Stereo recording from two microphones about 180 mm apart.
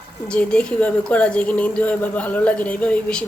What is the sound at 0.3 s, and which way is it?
A woman's voice, 5° left (ahead or behind).